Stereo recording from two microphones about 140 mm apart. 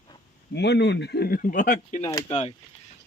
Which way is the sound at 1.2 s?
85° left.